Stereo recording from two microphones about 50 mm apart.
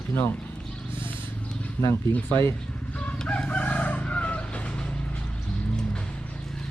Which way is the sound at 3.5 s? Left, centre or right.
Left.